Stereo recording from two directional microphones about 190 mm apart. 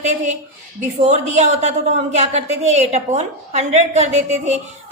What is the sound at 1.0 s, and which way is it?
A woman's voice, 40° right (ahead or behind).